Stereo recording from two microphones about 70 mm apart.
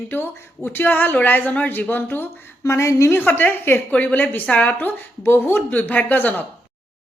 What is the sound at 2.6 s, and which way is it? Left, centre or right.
A woman's voice, left.